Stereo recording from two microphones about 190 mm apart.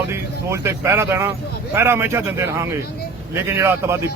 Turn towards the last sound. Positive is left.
turn(degrees=-15)  # may be behind; listen again after turning